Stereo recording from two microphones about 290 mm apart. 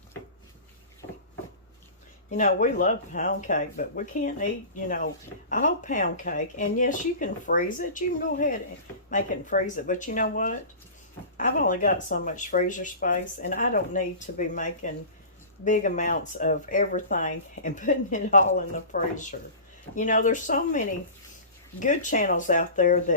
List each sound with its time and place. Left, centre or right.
2.3 s speech: left
5.5 s speech: left